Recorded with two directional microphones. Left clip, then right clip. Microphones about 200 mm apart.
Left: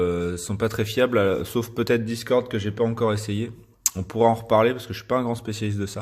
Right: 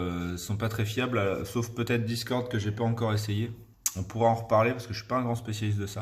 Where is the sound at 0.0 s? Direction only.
30° left (ahead or behind).